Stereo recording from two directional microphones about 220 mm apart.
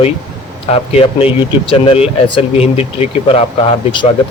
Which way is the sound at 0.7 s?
25° left (ahead or behind).